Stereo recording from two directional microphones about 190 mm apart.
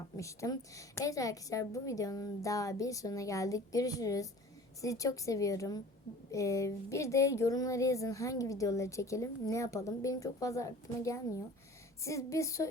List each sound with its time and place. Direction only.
0.2 s speech: 15° left (ahead or behind)